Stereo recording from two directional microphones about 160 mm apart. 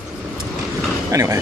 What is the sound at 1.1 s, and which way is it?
Speech, 20° right (ahead or behind).